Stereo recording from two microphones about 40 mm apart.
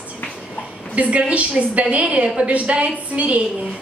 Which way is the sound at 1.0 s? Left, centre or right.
Right.